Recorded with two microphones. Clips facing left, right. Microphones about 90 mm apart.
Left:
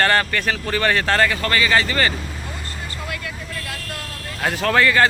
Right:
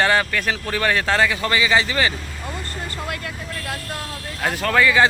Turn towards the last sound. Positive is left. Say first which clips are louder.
# even
turn(degrees=-5)  # may be behind; listen again after turning